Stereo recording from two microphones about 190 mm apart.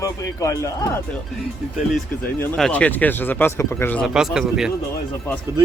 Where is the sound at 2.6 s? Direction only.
5° left (ahead or behind).